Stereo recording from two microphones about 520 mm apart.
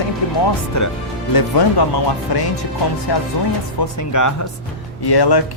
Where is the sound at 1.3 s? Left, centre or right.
Left.